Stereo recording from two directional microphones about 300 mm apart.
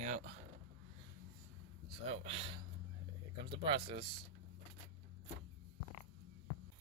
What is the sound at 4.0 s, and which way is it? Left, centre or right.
Speech, right.